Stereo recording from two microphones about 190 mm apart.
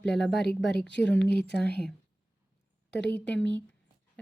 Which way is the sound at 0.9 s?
70° left (ahead or behind).